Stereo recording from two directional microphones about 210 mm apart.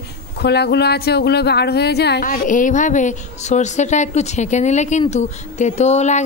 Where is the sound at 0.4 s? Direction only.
50° left (ahead or behind).